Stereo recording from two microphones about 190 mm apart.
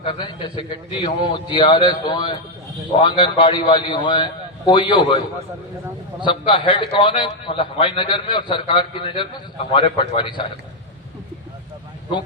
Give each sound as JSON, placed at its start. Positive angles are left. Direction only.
{"t": 0.0, "sound": "a man's voice", "side_deg": 25}
{"t": 6.2, "sound": "a man's voice", "side_deg": 25}